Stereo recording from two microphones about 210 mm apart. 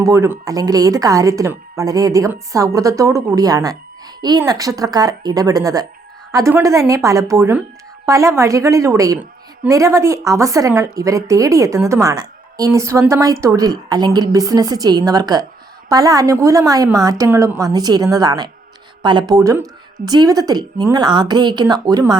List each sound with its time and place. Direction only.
0.0 s a woman's voice: 15° right (ahead or behind)